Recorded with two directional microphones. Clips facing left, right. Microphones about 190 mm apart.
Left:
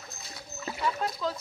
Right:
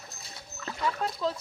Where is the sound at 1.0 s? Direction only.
30° right (ahead or behind).